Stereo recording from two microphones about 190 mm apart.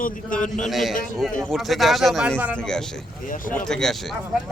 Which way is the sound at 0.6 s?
Centre (ahead or behind).